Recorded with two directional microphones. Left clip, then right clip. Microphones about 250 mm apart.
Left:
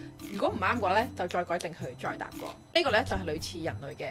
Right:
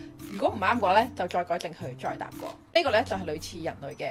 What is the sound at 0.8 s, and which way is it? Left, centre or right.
Speech, centre.